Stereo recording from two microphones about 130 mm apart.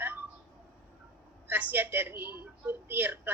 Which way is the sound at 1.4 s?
15° right (ahead or behind).